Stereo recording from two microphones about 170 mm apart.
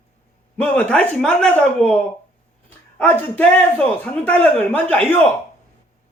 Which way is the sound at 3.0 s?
10° left (ahead or behind).